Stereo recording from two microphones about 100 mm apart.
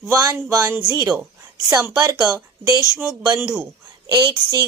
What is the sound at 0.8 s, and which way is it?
Speech, 45° right (ahead or behind).